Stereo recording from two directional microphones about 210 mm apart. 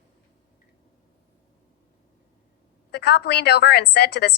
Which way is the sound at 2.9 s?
50° left (ahead or behind).